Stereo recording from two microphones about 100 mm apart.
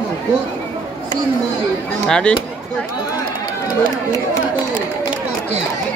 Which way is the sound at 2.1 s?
10° left (ahead or behind).